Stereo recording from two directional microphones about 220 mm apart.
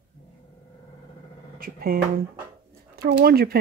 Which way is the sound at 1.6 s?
40° right (ahead or behind).